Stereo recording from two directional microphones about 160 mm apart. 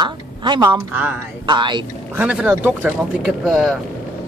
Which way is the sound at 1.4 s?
30° right (ahead or behind).